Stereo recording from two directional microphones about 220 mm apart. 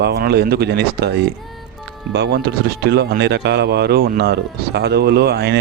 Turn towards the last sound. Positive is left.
turn(degrees=-45)  # may be behind; listen again after turning